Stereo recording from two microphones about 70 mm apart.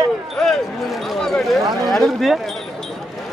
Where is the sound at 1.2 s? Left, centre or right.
Centre.